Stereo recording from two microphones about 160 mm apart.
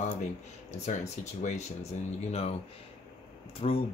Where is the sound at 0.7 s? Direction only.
45° left (ahead or behind).